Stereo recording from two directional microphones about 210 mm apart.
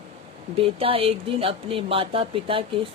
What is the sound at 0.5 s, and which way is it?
Speech, 25° right (ahead or behind).